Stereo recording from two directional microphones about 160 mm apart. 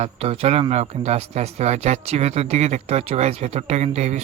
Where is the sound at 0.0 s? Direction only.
40° right (ahead or behind).